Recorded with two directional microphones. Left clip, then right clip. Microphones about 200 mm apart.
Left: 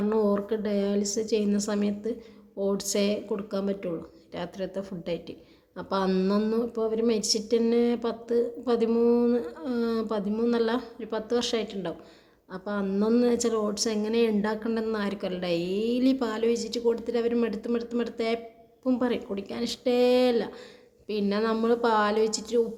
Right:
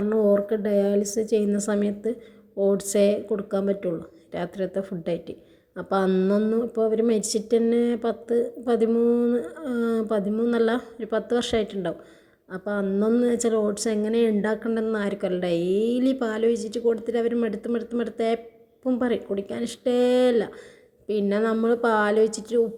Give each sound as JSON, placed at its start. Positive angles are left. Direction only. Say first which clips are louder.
{"t": 0.1, "sound": "a woman's voice", "louder": "right 6 dB", "side_deg": -15}